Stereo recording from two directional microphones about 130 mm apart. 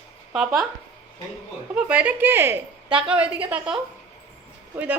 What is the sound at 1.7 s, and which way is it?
Speech, 10° right (ahead or behind).